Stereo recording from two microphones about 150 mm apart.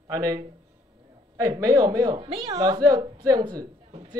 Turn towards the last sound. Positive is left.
turn(degrees=-25)  # may be behind; listen again after turning